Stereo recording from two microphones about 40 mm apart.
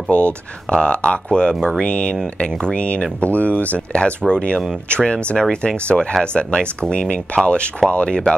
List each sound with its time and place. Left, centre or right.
0.1 s speech: left
3.9 s speech: left